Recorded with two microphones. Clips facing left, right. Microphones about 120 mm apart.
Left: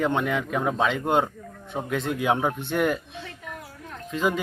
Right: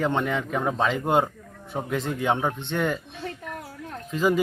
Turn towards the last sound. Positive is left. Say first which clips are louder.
# right 2 dB
turn(degrees=0)  # may be behind; listen again after turning